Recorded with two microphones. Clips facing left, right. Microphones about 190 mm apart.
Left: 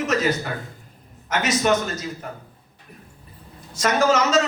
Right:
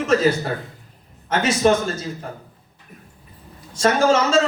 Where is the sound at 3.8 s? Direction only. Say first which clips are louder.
Right 2 dB; 30° right (ahead or behind).